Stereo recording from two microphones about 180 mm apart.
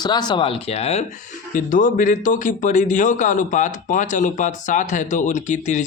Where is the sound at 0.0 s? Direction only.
25° left (ahead or behind).